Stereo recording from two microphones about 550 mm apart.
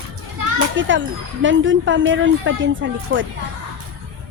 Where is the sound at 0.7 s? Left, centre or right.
Right.